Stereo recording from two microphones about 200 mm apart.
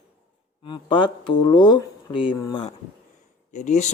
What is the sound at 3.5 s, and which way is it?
Speech, 35° left (ahead or behind).